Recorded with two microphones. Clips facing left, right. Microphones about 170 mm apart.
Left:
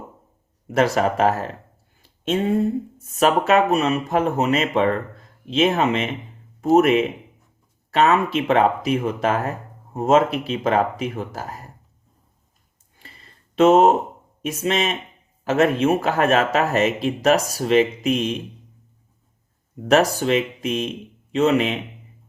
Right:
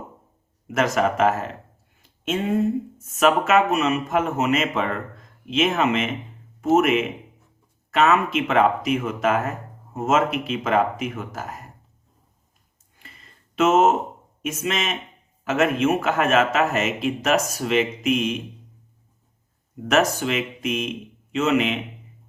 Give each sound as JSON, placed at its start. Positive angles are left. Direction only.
{"t": 0.7, "sound": "speech", "side_deg": 35}
{"t": 2.0, "sound": "a sound", "side_deg": 35}
{"t": 3.0, "sound": "speech", "side_deg": 35}
{"t": 13.0, "sound": "a sound", "side_deg": 35}
{"t": 14.4, "sound": "speech", "side_deg": 35}
{"t": 19.9, "sound": "speech", "side_deg": 35}